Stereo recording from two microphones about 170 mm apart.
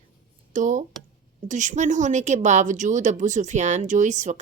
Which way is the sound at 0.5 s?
50° right (ahead or behind).